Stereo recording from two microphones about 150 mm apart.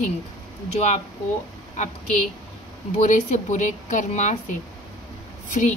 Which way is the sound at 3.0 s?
55° left (ahead or behind).